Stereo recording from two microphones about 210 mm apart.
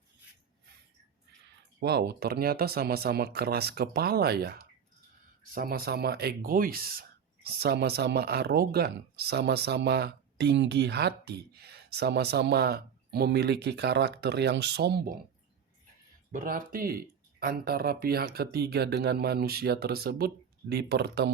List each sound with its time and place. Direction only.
1.8 s speech: 50° right (ahead or behind)
16.3 s speech: 40° right (ahead or behind)